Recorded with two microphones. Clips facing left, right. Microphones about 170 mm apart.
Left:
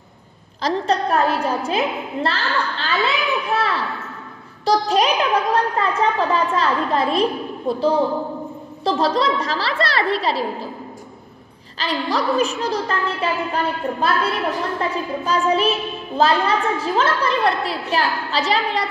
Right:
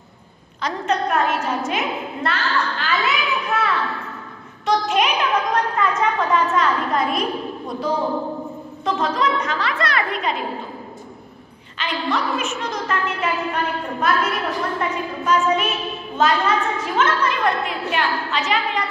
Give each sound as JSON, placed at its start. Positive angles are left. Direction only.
{"t": 0.6, "sound": "a woman's voice", "side_deg": 35}
{"t": 4.6, "sound": "a woman's voice", "side_deg": 35}
{"t": 11.8, "sound": "a woman's voice", "side_deg": 35}